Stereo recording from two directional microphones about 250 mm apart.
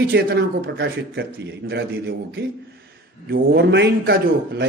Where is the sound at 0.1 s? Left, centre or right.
Right.